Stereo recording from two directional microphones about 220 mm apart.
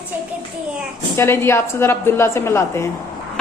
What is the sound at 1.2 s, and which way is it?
A woman's voice, 10° left (ahead or behind).